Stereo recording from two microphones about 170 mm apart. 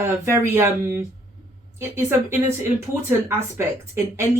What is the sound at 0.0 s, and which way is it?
Speech, 15° right (ahead or behind).